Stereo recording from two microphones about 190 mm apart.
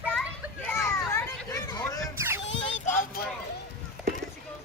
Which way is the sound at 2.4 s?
75° left (ahead or behind).